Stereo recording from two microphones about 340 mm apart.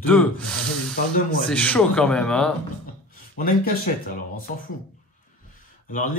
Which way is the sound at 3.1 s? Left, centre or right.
Left.